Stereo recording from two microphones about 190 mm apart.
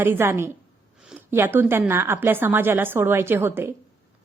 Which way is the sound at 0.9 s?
5° right (ahead or behind).